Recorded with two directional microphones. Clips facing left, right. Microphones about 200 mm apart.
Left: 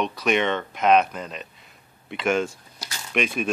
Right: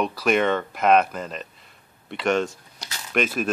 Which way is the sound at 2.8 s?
Centre (ahead or behind).